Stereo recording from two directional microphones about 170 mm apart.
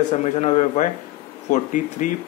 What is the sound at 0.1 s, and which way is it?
A man's voice, 40° left (ahead or behind).